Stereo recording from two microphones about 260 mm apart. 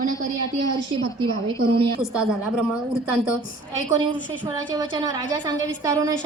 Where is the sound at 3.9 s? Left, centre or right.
Centre.